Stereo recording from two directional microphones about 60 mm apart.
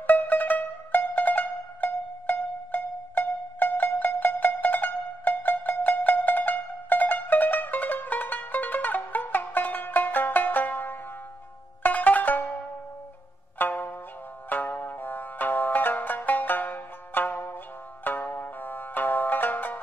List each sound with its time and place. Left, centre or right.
0.0 s music: left
11.8 s zither: left
13.6 s zither: left
14.5 s music: left